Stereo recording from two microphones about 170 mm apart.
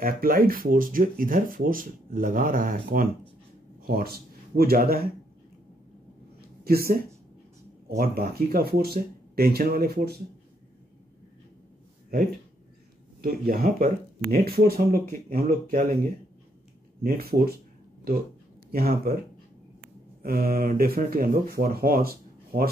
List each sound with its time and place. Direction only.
0.0 s speech: 60° right (ahead or behind)
6.6 s speech: 60° right (ahead or behind)
13.2 s speech: 60° right (ahead or behind)
17.0 s speech: 60° right (ahead or behind)
18.7 s speech: 60° right (ahead or behind)
20.2 s speech: 60° right (ahead or behind)